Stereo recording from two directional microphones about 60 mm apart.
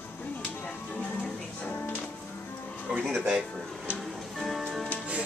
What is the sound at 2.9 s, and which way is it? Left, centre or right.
Music, centre.